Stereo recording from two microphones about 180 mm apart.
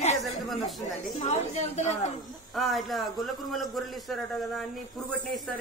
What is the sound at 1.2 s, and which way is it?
Speech, 40° left (ahead or behind).